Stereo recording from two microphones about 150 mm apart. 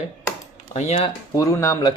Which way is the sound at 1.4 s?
20° left (ahead or behind).